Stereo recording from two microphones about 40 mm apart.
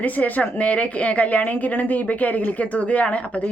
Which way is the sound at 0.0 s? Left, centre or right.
Left.